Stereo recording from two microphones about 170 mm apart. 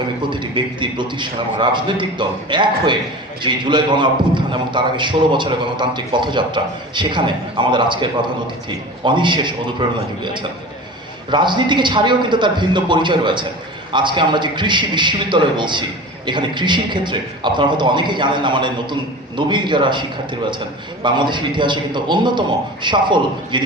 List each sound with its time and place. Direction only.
0.2 s a man's voice: 30° right (ahead or behind)